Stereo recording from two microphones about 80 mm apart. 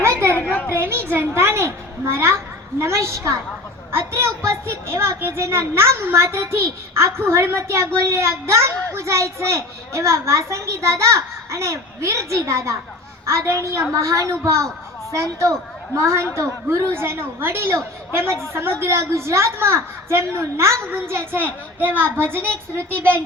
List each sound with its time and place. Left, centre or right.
0.0 s chatter: right
0.3 s chatter: centre
0.8 s a sound: right
3.9 s a child's voice: right